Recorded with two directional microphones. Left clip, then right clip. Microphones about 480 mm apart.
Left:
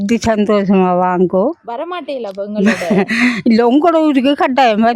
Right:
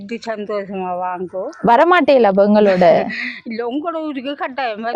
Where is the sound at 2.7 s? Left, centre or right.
Left.